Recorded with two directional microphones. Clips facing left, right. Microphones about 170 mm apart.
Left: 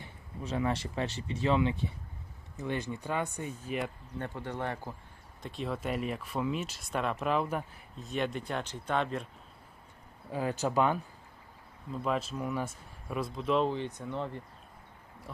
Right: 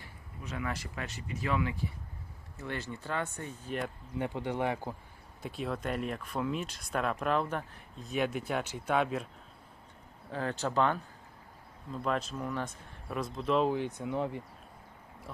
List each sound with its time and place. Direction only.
0.0 s speech: 30° left (ahead or behind); by 3.9 s 5° left (ahead or behind)
4.2 s speech: 15° right (ahead or behind)
10.3 s speech: 10° left (ahead or behind); by 14.4 s 10° right (ahead or behind)